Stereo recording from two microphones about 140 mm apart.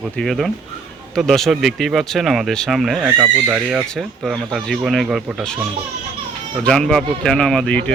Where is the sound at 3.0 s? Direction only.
15° right (ahead or behind).